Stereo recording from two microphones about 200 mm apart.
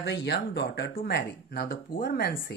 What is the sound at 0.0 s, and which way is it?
Speech, 60° left (ahead or behind).